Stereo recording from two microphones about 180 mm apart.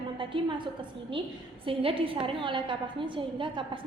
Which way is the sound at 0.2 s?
30° right (ahead or behind).